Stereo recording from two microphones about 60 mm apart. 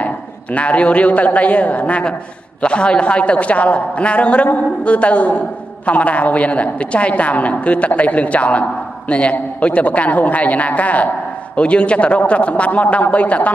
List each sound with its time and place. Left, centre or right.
0.0 s a man's voice: left